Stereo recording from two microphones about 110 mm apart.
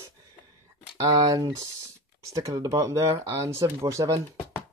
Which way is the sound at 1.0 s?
35° right (ahead or behind).